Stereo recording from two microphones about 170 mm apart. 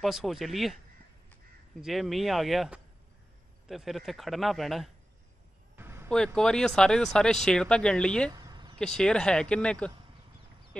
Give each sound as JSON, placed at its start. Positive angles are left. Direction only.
{"t": 0.0, "sound": "speech", "side_deg": 0}
{"t": 1.8, "sound": "speech", "side_deg": 0}
{"t": 5.8, "sound": "a sound", "side_deg": -15}
{"t": 6.0, "sound": "speech", "side_deg": 5}
{"t": 8.3, "sound": "a sound", "side_deg": -25}
{"t": 8.7, "sound": "speech", "side_deg": 5}